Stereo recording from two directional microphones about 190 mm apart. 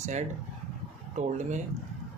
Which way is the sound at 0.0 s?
40° right (ahead or behind).